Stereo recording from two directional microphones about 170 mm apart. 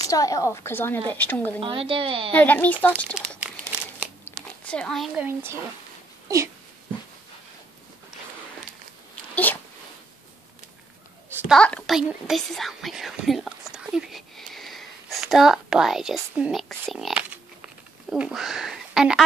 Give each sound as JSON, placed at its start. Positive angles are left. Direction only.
{"t": 0.0, "sound": "a woman's voice", "side_deg": 20}
{"t": 1.6, "sound": "speech", "side_deg": -30}
{"t": 2.3, "sound": "a woman's voice", "side_deg": 10}
{"t": 4.2, "sound": "a sound", "side_deg": 5}
{"t": 5.2, "sound": "speech", "side_deg": -15}
{"t": 6.2, "sound": "a sound", "side_deg": -20}
{"t": 9.3, "sound": "speech", "side_deg": 10}
{"t": 11.2, "sound": "a sound", "side_deg": -10}
{"t": 11.5, "sound": "speech", "side_deg": 5}